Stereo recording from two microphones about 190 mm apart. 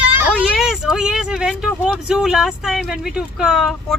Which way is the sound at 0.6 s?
5° right (ahead or behind).